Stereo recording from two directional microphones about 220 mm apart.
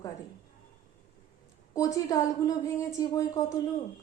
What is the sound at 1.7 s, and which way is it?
A woman's voice, 15° left (ahead or behind).